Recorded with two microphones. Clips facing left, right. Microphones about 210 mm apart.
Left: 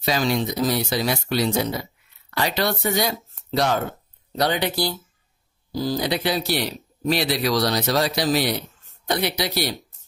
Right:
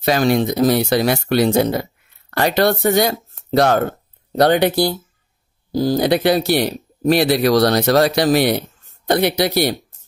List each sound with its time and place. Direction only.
0.0 s speech: 55° right (ahead or behind)